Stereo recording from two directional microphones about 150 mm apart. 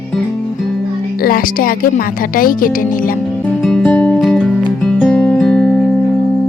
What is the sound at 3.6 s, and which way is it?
Music, centre (ahead or behind).